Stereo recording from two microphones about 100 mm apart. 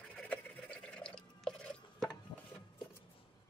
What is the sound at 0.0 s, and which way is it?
Water, 10° left (ahead or behind).